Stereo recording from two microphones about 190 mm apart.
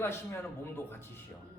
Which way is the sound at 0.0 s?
15° left (ahead or behind).